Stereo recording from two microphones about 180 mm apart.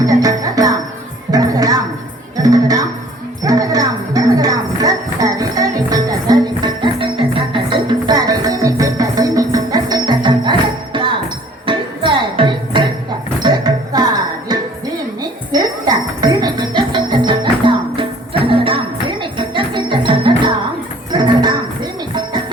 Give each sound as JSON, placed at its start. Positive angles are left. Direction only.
{"t": 0.0, "sound": "music", "side_deg": -20}